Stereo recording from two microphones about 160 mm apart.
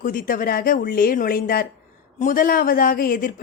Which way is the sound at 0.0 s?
60° left (ahead or behind).